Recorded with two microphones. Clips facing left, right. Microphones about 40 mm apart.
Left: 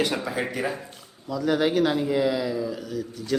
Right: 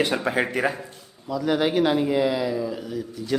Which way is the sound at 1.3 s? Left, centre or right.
Centre.